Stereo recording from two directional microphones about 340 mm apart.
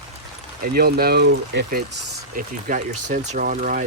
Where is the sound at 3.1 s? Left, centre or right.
Right.